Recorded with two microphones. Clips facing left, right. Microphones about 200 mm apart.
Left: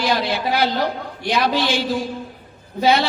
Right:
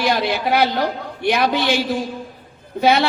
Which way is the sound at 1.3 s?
60° right (ahead or behind).